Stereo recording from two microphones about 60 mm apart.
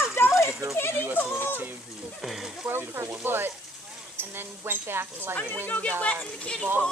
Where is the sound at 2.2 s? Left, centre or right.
Centre.